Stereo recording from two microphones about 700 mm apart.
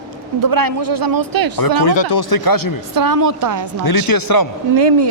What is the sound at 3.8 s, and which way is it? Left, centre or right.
Speech, left.